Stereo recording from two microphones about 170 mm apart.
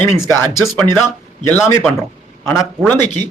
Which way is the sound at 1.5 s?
10° left (ahead or behind).